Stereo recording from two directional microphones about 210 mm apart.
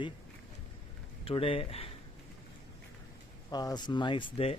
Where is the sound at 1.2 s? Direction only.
25° left (ahead or behind).